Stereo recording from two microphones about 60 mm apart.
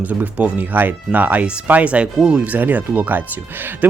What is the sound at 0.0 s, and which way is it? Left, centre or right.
Speech, right.